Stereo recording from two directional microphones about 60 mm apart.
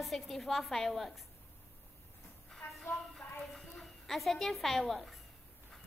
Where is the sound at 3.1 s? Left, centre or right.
Centre.